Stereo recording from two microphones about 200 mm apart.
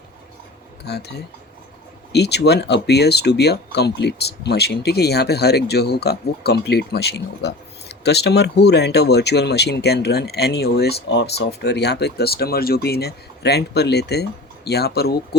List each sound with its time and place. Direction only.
0.9 s speech: 55° left (ahead or behind)
2.1 s speech: 55° left (ahead or behind)